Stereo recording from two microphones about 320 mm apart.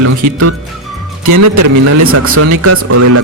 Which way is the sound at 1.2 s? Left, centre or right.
Right.